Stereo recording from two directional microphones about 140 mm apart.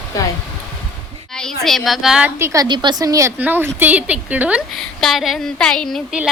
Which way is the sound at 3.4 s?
15° right (ahead or behind).